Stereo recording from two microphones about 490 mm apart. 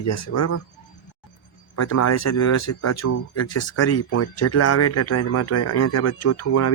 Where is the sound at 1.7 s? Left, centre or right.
Left.